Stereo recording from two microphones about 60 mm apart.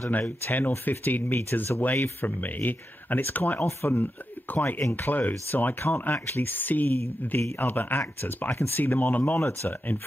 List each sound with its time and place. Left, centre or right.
0.1 s speech: left